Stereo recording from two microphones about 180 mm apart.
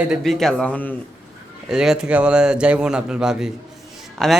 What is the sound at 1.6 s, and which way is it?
Speech, 5° right (ahead or behind).